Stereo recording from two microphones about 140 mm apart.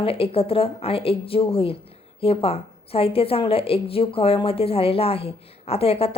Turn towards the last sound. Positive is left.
turn(degrees=45)  # may be behind; listen again after turning